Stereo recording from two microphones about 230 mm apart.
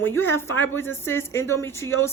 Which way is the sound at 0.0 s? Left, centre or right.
Centre.